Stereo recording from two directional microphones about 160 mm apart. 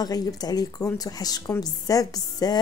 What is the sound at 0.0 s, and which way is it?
Speech, 25° left (ahead or behind).